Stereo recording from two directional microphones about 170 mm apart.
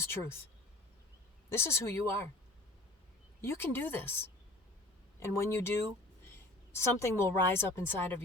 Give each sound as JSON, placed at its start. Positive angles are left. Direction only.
{"t": 0.0, "sound": "a woman's voice", "side_deg": 15}
{"t": 1.5, "sound": "a woman's voice", "side_deg": 15}
{"t": 3.4, "sound": "a woman's voice", "side_deg": 15}
{"t": 5.3, "sound": "a woman's voice", "side_deg": 15}
{"t": 6.7, "sound": "a woman's voice", "side_deg": 15}